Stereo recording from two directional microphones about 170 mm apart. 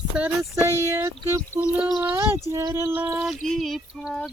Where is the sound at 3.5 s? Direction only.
Centre (ahead or behind).